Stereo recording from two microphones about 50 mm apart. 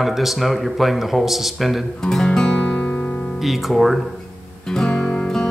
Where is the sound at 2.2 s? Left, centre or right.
Centre.